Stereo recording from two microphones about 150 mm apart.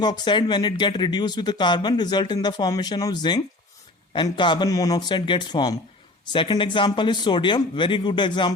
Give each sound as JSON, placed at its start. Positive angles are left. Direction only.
{"t": 0.0, "sound": "speech", "side_deg": 30}